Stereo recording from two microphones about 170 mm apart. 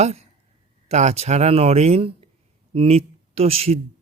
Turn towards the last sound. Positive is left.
turn(degrees=-35)  # may be behind; listen again after turning